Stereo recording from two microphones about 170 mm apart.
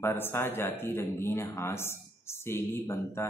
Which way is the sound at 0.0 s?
15° left (ahead or behind).